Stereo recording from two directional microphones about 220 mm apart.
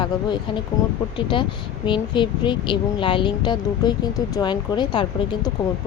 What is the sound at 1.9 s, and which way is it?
Speech, 20° left (ahead or behind).